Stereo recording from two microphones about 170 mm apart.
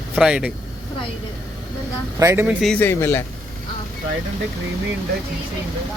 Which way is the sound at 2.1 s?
15° right (ahead or behind).